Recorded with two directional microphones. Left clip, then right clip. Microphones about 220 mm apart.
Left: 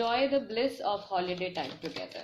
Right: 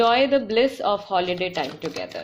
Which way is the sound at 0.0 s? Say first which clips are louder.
Right 10 dB; 40° right (ahead or behind).